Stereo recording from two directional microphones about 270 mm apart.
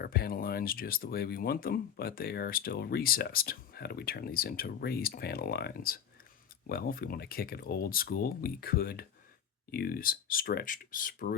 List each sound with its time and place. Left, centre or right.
0.0 s speech: left